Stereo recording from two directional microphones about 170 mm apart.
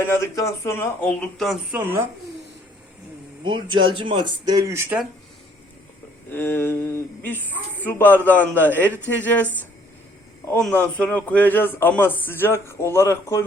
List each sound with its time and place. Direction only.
0.0 s a man's voice: 15° left (ahead or behind)
1.7 s speech: 10° right (ahead or behind)
3.4 s speech: 30° right (ahead or behind)
6.3 s a man's voice: 15° left (ahead or behind)
10.5 s a man's voice: 5° left (ahead or behind)